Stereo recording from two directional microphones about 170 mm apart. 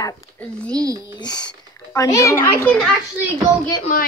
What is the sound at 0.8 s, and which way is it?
Speech, 20° right (ahead or behind).